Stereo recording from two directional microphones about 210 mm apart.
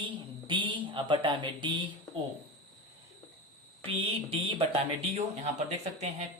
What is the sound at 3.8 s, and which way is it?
Speech, 25° right (ahead or behind).